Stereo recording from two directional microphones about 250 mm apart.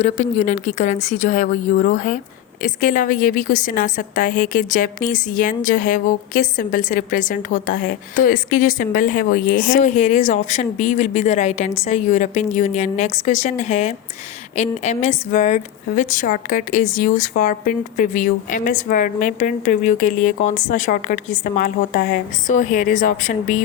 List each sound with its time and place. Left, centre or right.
0.0 s a woman's voice: left